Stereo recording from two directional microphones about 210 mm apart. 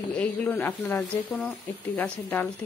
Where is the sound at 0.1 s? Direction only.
5° left (ahead or behind).